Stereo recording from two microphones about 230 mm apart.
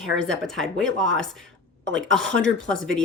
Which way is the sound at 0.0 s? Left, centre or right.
Centre.